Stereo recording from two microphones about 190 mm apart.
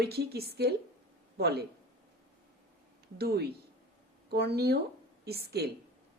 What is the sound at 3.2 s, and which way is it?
A woman's voice, 55° right (ahead or behind).